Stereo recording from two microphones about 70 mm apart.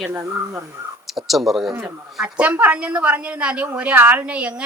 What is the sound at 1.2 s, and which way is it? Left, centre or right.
Speech, centre.